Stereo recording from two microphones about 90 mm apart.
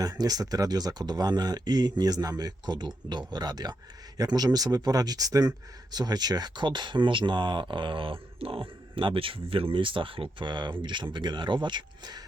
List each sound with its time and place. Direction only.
0.0 s speech: 45° right (ahead or behind)